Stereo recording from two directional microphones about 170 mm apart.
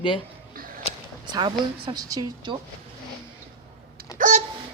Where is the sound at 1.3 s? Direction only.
25° right (ahead or behind).